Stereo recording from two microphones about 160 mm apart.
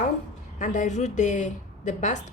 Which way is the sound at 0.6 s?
50° left (ahead or behind).